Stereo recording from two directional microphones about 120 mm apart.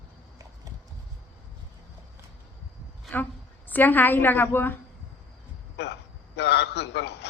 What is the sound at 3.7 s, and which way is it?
A woman's voice, 15° left (ahead or behind).